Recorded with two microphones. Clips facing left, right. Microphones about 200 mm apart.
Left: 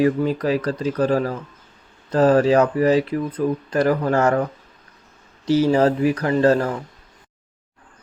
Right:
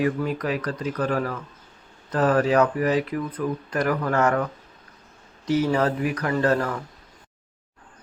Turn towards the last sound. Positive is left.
turn(degrees=25)  # may be behind; listen again after turning